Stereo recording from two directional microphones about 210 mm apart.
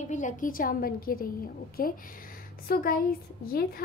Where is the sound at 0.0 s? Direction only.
35° left (ahead or behind).